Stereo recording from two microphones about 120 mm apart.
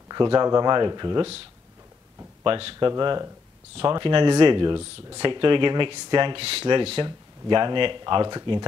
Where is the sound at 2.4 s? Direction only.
45° right (ahead or behind).